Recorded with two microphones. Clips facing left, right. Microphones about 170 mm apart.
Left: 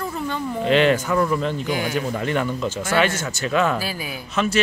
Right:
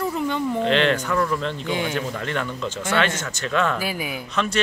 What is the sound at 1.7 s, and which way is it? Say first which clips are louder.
Speech: left 1 dB; 25° right (ahead or behind).